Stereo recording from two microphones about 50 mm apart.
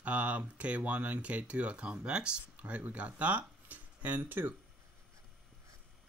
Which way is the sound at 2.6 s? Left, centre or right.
Right.